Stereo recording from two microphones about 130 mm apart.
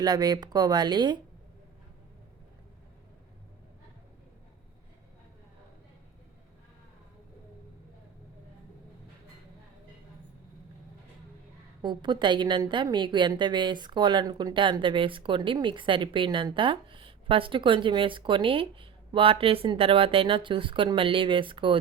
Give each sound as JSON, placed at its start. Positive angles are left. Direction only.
{"t": 0.0, "sound": "a woman's voice", "side_deg": -30}
{"t": 11.8, "sound": "a woman's voice", "side_deg": -35}